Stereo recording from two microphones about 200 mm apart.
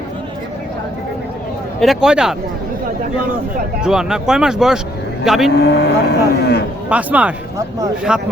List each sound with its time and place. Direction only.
1.8 s speech: centre (ahead or behind)
3.8 s speech: 5° right (ahead or behind)
5.5 s speech: 55° left (ahead or behind)
6.9 s speech: 5° right (ahead or behind)